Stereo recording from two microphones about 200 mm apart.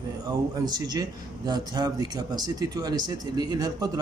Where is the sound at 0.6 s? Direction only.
20° right (ahead or behind).